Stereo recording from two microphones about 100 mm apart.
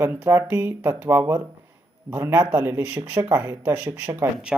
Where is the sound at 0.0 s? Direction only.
25° right (ahead or behind).